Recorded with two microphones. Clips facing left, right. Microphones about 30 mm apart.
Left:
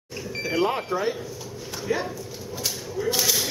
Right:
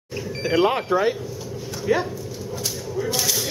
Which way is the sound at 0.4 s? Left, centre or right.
Right.